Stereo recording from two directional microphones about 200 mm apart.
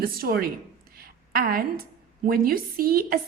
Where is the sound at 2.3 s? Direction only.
45° right (ahead or behind).